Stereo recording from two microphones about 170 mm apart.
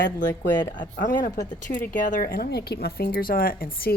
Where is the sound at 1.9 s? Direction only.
50° left (ahead or behind).